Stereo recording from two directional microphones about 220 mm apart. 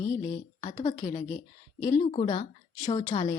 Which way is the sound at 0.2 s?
30° left (ahead or behind).